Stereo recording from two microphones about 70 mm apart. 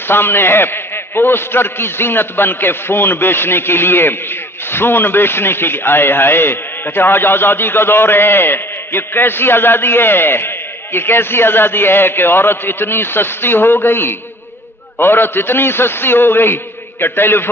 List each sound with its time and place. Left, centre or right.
0.1 s a man's voice: left